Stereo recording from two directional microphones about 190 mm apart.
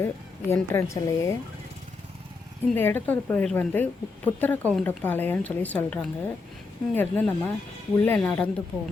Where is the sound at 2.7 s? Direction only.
10° left (ahead or behind).